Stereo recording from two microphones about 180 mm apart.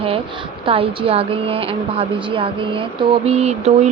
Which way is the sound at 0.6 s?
30° right (ahead or behind).